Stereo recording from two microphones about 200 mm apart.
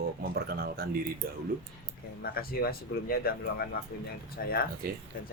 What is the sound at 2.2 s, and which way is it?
Speech, 50° left (ahead or behind).